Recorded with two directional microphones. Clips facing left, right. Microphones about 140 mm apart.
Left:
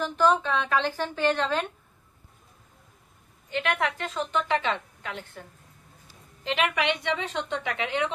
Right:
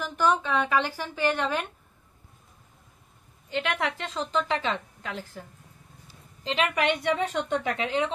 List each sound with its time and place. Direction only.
0.0 s a woman's voice: 10° right (ahead or behind)
3.4 s a woman's voice: 30° right (ahead or behind)
6.4 s a woman's voice: 35° right (ahead or behind)
6.8 s a woman's voice: 50° right (ahead or behind)
7.7 s a woman's voice: 35° right (ahead or behind)